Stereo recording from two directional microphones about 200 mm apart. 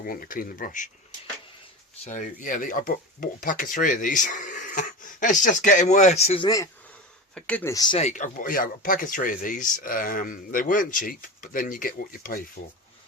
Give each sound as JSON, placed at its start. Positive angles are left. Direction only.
{"t": 0.0, "sound": "speech", "side_deg": 45}
{"t": 2.0, "sound": "speech", "side_deg": 40}
{"t": 7.3, "sound": "speech", "side_deg": 5}
{"t": 7.9, "sound": "speech", "side_deg": 35}